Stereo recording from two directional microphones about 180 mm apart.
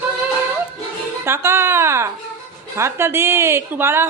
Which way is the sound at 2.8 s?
15° right (ahead or behind).